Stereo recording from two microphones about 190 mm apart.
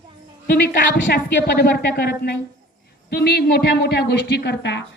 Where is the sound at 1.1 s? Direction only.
55° left (ahead or behind).